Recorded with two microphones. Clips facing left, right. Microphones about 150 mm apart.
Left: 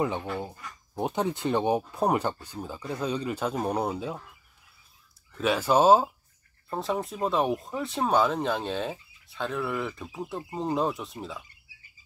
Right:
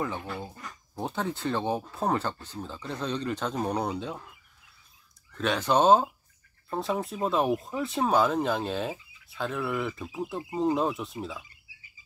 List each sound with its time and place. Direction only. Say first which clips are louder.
0.0 s speech: left 4 dB; 20° left (ahead or behind)
5.4 s speech: left 2 dB; 5° left (ahead or behind)